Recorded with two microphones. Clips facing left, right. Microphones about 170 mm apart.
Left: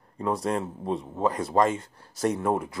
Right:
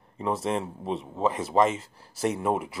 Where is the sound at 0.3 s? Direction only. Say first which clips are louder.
Left 1 dB; 5° right (ahead or behind).